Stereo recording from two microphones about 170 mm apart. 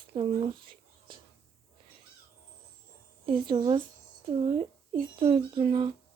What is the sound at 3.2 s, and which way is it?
Speech, 30° right (ahead or behind).